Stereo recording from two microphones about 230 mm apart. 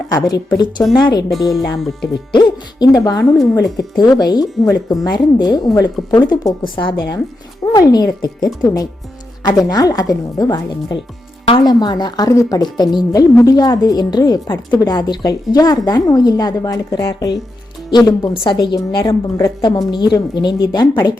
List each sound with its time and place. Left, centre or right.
0.5 s a woman's voice: centre
1.3 s speech: centre
2.3 s a woman's voice: centre